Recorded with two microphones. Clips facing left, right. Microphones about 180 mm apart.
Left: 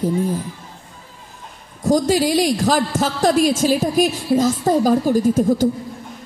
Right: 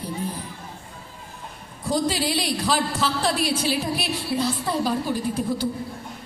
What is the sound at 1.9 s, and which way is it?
A man's voice, 45° left (ahead or behind).